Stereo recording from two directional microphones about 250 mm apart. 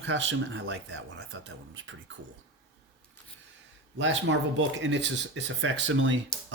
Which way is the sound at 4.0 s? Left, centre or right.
Right.